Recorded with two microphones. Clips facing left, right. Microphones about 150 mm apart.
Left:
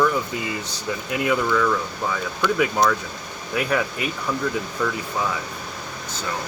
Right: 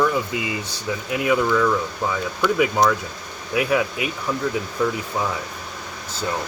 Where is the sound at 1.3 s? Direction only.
10° right (ahead or behind).